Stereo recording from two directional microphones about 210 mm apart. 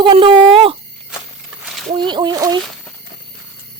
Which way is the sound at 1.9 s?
20° right (ahead or behind).